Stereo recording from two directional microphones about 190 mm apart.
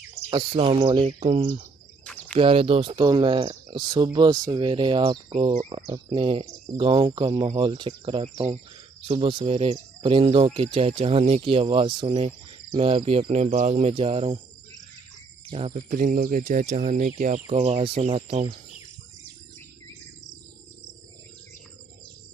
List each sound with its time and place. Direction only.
0.3 s speech: 25° right (ahead or behind)
2.0 s cricket: 5° left (ahead or behind)
2.4 s speech: 30° right (ahead or behind)
15.4 s speech: 30° right (ahead or behind)
15.9 s speech: 45° right (ahead or behind)
17.5 s speech: 30° right (ahead or behind)